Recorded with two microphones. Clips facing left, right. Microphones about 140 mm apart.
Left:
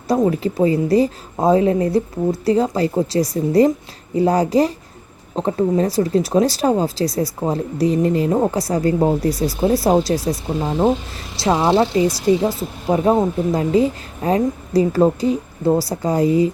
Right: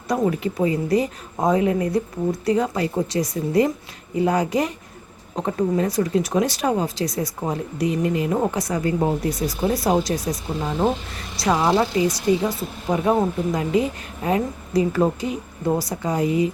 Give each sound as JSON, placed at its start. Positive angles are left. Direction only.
{"t": 0.1, "sound": "speech", "side_deg": 30}